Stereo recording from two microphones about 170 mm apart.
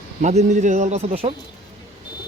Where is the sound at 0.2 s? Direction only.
45° right (ahead or behind).